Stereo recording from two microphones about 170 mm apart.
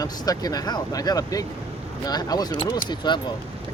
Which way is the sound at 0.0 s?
20° left (ahead or behind).